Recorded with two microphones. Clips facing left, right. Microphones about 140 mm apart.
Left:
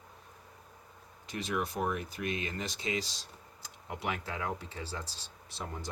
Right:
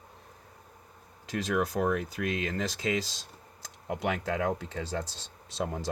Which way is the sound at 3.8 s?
90° right.